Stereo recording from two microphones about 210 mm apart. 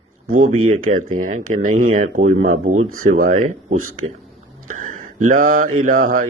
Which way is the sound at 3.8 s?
90° right.